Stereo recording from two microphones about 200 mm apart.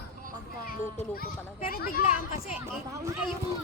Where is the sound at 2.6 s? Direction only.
15° right (ahead or behind).